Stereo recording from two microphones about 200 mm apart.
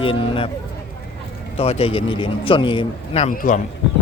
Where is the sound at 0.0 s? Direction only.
25° left (ahead or behind).